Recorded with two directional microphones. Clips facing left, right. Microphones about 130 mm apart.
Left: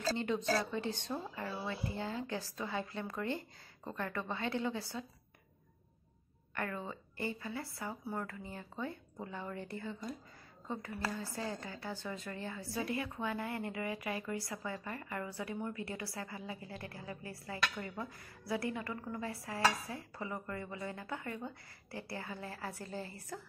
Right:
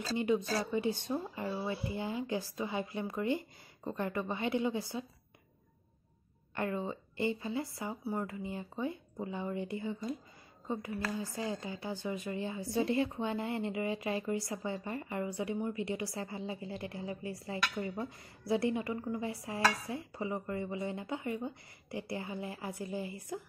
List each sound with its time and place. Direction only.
0.0 s speech: 10° right (ahead or behind)
6.5 s speech: 20° right (ahead or behind)
11.1 s a woman's voice: 15° right (ahead or behind)